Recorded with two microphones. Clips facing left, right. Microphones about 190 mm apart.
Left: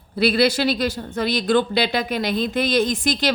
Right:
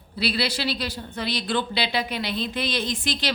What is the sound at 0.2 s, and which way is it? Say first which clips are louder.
A woman's voice: left 8 dB; 50° left (ahead or behind).